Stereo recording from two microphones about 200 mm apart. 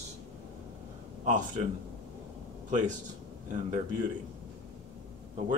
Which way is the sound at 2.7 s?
40° right (ahead or behind).